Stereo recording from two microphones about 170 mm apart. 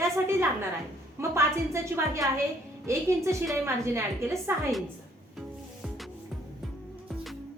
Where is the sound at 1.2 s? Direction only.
15° right (ahead or behind).